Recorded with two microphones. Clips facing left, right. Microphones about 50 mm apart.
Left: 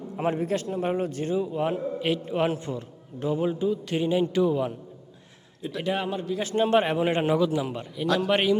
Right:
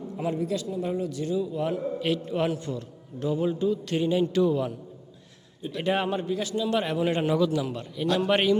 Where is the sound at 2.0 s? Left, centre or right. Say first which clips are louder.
Left 2 dB; centre.